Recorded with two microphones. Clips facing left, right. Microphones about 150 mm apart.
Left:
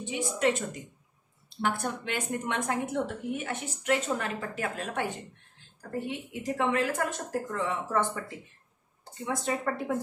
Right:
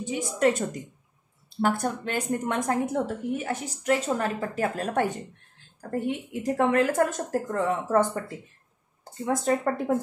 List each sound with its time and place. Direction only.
0.0 s a woman's voice: 40° right (ahead or behind)
9.2 s speech: 45° right (ahead or behind)